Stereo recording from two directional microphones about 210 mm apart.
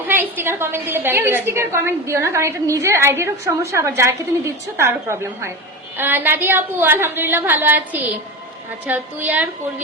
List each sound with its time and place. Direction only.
0.1 s a woman's voice: 10° right (ahead or behind)